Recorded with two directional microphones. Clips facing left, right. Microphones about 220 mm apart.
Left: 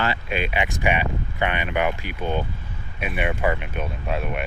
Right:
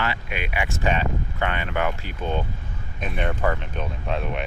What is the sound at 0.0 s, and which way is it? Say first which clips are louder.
Speech: left 3 dB; 30° left (ahead or behind).